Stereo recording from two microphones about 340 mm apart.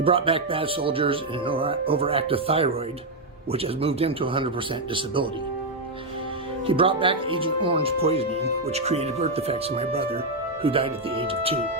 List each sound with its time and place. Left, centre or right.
0.0 s speech: centre
6.7 s speech: centre